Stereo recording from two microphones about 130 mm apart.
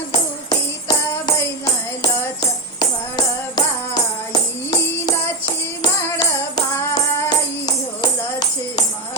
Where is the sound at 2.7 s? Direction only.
35° left (ahead or behind).